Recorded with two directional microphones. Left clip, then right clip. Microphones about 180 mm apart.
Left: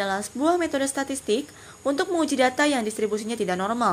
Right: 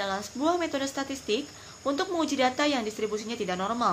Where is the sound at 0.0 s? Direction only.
30° left (ahead or behind).